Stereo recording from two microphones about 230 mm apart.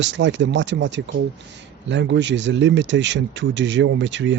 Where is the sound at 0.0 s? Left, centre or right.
Right.